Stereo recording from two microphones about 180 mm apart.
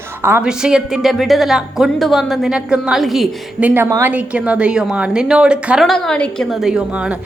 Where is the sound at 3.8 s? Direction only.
20° right (ahead or behind).